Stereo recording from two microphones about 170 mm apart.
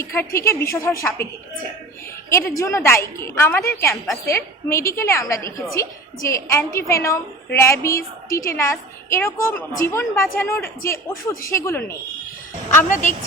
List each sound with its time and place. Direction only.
0.0 s a woman's voice: 15° left (ahead or behind)
2.3 s a woman's voice: 15° left (ahead or behind)
12.9 s a woman's voice: 45° left (ahead or behind)